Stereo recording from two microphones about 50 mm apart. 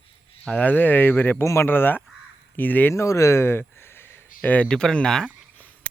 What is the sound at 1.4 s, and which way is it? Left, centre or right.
Speech, left.